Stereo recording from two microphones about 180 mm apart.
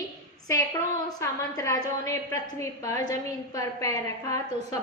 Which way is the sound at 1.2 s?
20° left (ahead or behind).